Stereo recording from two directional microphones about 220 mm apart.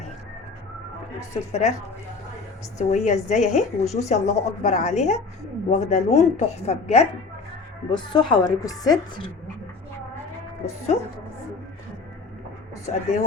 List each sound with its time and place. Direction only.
1.3 s speech: 30° left (ahead or behind)
2.7 s a woman's voice: 30° left (ahead or behind)
12.8 s a woman's voice: 35° left (ahead or behind)